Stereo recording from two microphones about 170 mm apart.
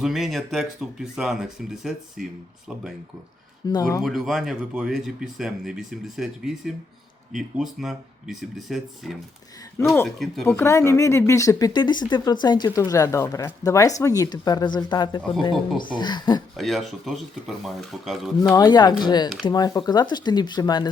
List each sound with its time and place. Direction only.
0.0 s speech: centre (ahead or behind)
3.7 s speech: 20° left (ahead or behind)
4.0 s speech: centre (ahead or behind)
10.2 s speech: 5° left (ahead or behind); by 16.4 s 25° left (ahead or behind)
16.6 s speech: centre (ahead or behind)
18.5 s speech: 25° left (ahead or behind)